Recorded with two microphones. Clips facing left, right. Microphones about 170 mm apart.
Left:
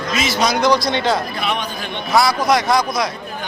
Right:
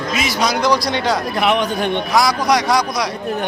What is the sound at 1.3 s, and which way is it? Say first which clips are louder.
Speech: right 7 dB; 75° right (ahead or behind).